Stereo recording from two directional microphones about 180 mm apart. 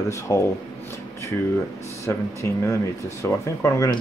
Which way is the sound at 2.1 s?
15° left (ahead or behind).